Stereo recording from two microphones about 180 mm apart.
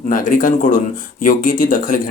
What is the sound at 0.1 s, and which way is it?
Speech, 50° left (ahead or behind).